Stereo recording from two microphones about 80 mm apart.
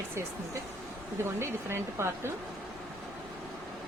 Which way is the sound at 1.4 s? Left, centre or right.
Right.